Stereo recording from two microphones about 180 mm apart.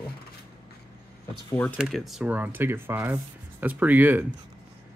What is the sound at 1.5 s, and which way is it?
Speech, 10° left (ahead or behind).